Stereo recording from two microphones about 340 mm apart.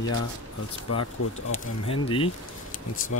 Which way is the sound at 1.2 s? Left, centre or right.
Left.